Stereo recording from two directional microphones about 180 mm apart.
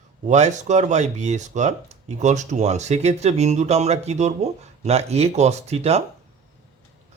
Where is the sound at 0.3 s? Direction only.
40° right (ahead or behind).